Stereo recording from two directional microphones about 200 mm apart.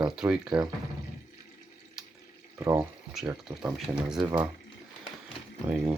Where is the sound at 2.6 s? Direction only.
15° right (ahead or behind).